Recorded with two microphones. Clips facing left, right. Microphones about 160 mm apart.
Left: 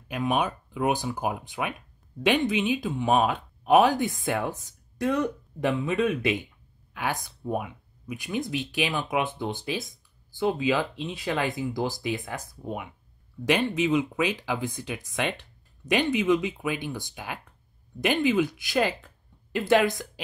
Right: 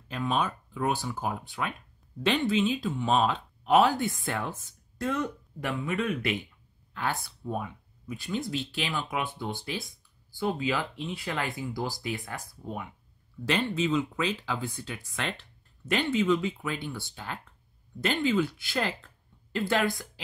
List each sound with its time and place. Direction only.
0.1 s speech: 15° left (ahead or behind)